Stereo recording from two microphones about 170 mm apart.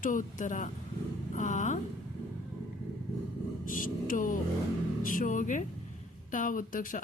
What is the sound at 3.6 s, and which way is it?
Speech, 55° left (ahead or behind).